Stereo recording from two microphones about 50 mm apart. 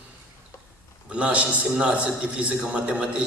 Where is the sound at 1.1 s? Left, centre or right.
Right.